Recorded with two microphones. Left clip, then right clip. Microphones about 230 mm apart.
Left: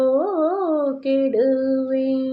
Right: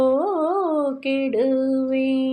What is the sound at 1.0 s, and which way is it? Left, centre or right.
Speech, right.